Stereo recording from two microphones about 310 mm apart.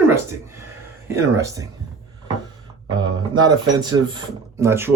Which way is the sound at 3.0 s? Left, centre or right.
Centre.